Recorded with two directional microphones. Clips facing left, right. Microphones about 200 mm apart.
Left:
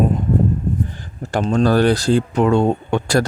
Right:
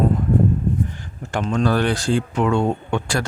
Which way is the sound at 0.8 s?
35° left (ahead or behind).